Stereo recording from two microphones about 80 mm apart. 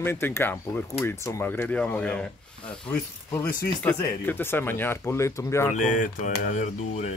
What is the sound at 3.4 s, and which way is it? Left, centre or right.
Speech, centre.